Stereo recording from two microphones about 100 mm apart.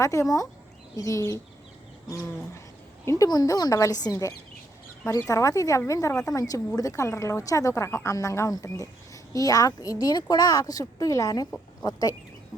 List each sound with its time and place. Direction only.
0.0 s a woman's voice: 30° left (ahead or behind)
3.2 s a woman's voice: 40° left (ahead or behind)